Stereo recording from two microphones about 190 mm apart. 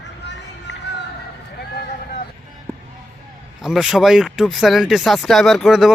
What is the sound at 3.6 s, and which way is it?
Speech, centre (ahead or behind).